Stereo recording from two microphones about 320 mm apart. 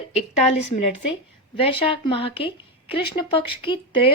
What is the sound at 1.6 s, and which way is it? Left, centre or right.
Speech, centre.